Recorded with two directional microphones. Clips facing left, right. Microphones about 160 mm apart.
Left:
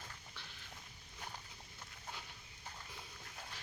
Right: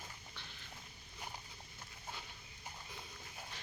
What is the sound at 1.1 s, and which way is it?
Dog, 10° right (ahead or behind).